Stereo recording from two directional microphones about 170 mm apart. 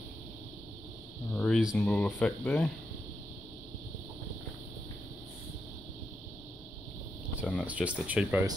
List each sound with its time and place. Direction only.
1.3 s a sound: 5° left (ahead or behind)
1.8 s speech: 10° left (ahead or behind)
7.6 s speech: 10° right (ahead or behind)